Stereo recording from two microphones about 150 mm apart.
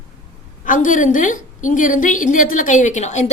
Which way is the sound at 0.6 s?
60° left (ahead or behind).